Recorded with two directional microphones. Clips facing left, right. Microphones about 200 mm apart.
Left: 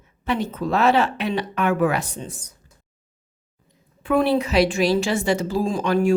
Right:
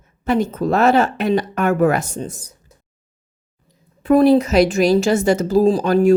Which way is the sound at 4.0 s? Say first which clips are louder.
Right 7 dB; 40° right (ahead or behind).